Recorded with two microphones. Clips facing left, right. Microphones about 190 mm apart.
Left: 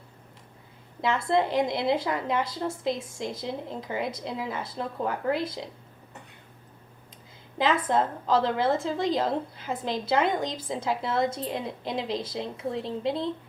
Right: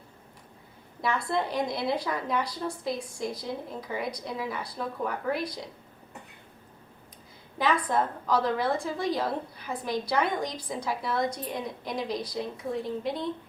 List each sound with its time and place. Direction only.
1.0 s a woman's voice: 20° left (ahead or behind)
7.7 s a woman's voice: 25° left (ahead or behind)